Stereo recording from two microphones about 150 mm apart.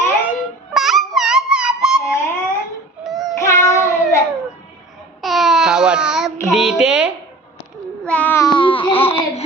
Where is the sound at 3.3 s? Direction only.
20° left (ahead or behind).